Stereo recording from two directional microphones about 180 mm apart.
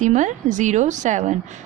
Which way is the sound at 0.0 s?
40° right (ahead or behind).